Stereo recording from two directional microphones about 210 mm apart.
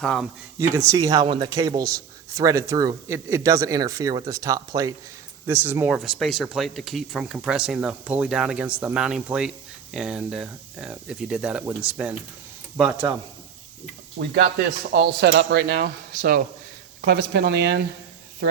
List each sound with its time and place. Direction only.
0.0 s speech: centre (ahead or behind)
0.7 s speech: 15° right (ahead or behind)
14.9 s speech: 55° right (ahead or behind)